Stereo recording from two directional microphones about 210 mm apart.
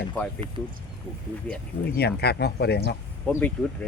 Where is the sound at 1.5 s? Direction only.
5° left (ahead or behind).